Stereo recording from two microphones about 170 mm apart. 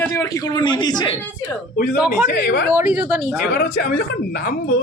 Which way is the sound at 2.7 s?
5° right (ahead or behind).